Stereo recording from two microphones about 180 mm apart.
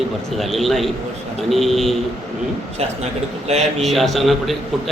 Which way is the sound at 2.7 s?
35° right (ahead or behind).